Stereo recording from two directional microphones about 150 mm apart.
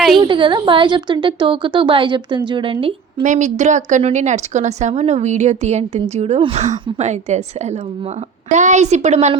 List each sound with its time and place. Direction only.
0.2 s a woman's voice: 35° right (ahead or behind)
3.2 s a woman's voice: 55° right (ahead or behind)
8.5 s a woman's voice: 50° right (ahead or behind)